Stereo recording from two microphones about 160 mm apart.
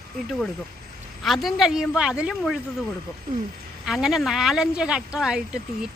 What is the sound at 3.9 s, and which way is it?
Speech, centre (ahead or behind).